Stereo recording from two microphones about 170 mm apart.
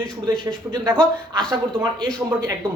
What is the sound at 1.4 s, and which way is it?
Speech, 25° right (ahead or behind).